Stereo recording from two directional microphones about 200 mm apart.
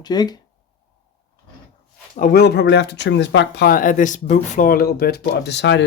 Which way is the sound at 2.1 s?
45° left (ahead or behind).